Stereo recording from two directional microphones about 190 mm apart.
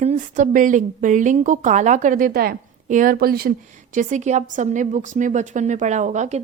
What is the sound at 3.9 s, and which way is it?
Speech, 40° right (ahead or behind).